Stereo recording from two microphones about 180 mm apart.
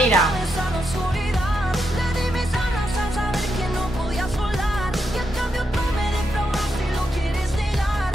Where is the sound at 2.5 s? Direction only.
Centre (ahead or behind).